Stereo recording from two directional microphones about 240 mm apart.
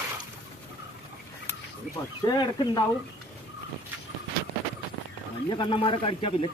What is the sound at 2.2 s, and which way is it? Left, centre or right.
Speech, centre.